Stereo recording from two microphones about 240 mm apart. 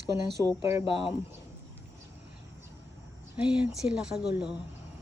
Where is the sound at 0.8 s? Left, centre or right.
Left.